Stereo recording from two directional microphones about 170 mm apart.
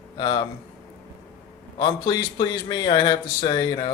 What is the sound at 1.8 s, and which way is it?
Speech, 25° left (ahead or behind).